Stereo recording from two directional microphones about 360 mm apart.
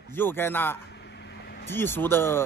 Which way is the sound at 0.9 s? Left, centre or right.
Left.